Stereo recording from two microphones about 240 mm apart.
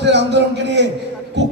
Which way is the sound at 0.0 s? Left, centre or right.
Right.